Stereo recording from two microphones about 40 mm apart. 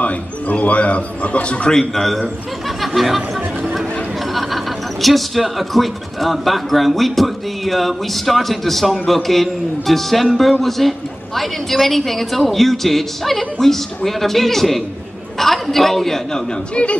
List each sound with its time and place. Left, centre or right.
0.0 s speech: left
1.7 s a man's voice: centre
2.8 s chatter: centre
4.3 s a man's voice: centre